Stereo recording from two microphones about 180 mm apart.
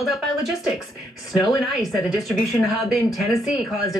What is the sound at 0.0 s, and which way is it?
Speech, centre (ahead or behind).